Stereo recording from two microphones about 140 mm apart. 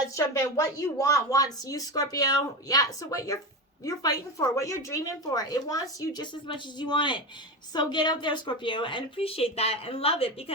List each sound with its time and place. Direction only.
0.0 s a woman's voice: 25° left (ahead or behind); by 10.3 s 45° left (ahead or behind)